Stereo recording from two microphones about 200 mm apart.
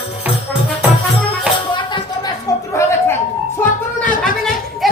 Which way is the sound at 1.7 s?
20° left (ahead or behind).